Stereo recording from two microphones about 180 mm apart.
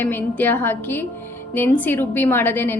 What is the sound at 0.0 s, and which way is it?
A woman's voice, 10° left (ahead or behind).